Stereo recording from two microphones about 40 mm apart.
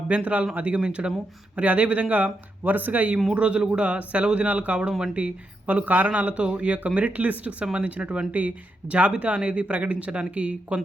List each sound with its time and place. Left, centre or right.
0.1 s speech: right
1.5 s speech: right
3.3 s speech: right
6.1 s speech: right
7.6 s speech: right